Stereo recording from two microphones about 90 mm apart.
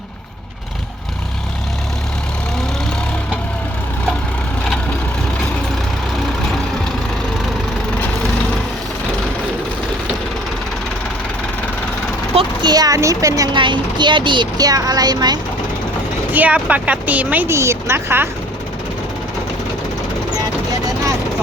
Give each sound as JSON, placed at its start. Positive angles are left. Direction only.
{"t": 12.6, "sound": "a sound", "side_deg": -45}
{"t": 13.0, "sound": "speech", "side_deg": -40}
{"t": 13.5, "sound": "speech", "side_deg": -60}
{"t": 14.7, "sound": "speech", "side_deg": -45}
{"t": 16.3, "sound": "speech", "side_deg": -15}
{"t": 17.5, "sound": "a woman's voice", "side_deg": -30}